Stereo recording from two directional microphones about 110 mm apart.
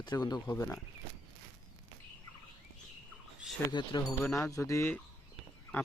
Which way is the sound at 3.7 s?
45° left (ahead or behind).